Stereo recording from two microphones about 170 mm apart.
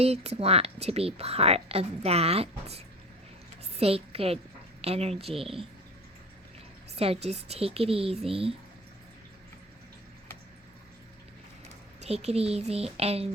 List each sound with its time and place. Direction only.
0.0 s a woman's voice: 40° right (ahead or behind)
6.9 s a woman's voice: 35° right (ahead or behind)
11.9 s a woman's voice: 40° right (ahead or behind)